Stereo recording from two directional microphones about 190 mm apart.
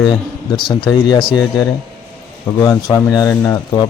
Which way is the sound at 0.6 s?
20° left (ahead or behind).